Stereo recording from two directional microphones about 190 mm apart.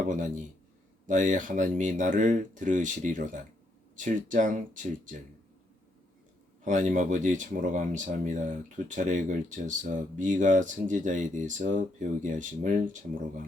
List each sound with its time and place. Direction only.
0.0 s speech: 40° right (ahead or behind)
6.7 s speech: 40° right (ahead or behind)